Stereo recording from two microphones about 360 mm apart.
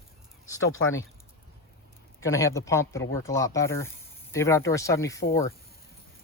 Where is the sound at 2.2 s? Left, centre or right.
Centre.